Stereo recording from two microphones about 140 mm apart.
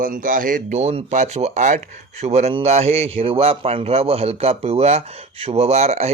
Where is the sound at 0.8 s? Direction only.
50° right (ahead or behind).